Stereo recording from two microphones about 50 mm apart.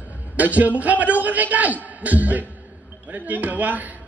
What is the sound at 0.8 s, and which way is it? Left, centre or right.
A man's voice, right.